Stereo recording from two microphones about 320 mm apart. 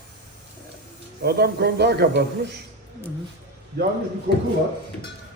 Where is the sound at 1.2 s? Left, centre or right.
Right.